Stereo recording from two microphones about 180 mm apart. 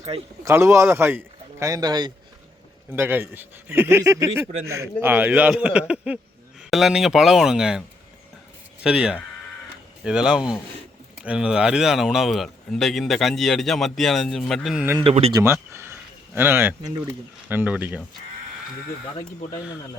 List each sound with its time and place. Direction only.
0.1 s speech: 35° right (ahead or behind)
0.4 s a man's voice: 15° right (ahead or behind)
2.9 s a man's voice: 10° right (ahead or behind)
15.0 s speech: 35° right (ahead or behind)
15.3 s a man's voice: 15° right (ahead or behind)
15.7 s a sound: 15° right (ahead or behind)
17.5 s a man's voice: 10° right (ahead or behind)